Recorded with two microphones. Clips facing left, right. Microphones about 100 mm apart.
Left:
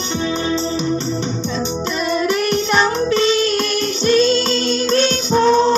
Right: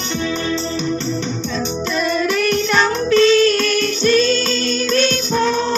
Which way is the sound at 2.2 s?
20° left (ahead or behind).